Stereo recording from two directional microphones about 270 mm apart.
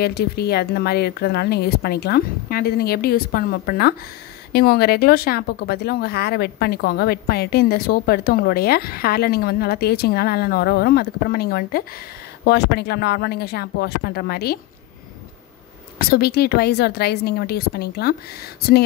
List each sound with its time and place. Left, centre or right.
0.0 s speech: left
16.0 s speech: left